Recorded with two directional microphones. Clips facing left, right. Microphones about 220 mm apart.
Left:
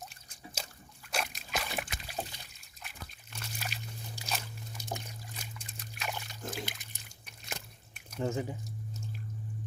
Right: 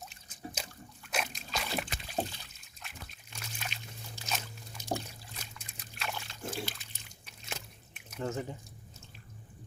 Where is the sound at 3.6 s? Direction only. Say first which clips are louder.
Left 2 dB; 5° left (ahead or behind).